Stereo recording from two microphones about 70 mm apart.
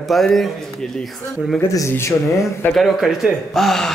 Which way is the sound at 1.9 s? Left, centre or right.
Left.